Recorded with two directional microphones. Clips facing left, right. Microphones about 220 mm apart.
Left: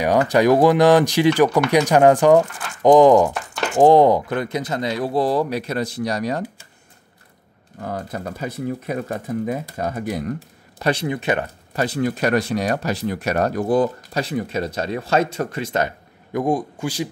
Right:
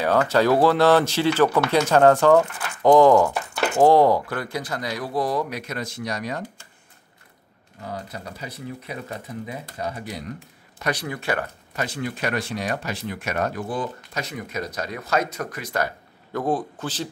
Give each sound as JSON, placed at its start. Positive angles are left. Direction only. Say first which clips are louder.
{"t": 0.0, "sound": "speech", "louder": "left 3 dB", "side_deg": 15}
{"t": 7.8, "sound": "speech", "louder": "left 6 dB", "side_deg": 50}
{"t": 10.8, "sound": "speech", "louder": "left 6 dB", "side_deg": 25}
{"t": 11.7, "sound": "speech", "louder": "left 7 dB", "side_deg": 35}
{"t": 16.3, "sound": "speech", "louder": "left 3 dB", "side_deg": 15}